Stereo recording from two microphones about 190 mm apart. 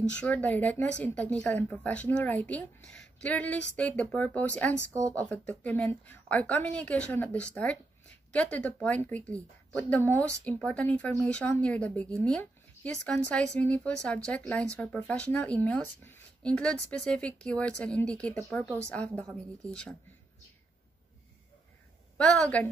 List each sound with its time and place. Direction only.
0.1 s speech: 5° left (ahead or behind)
4.7 s speech: 15° right (ahead or behind)
5.1 s speech: 5° left (ahead or behind)
22.1 s a woman's voice: 5° left (ahead or behind)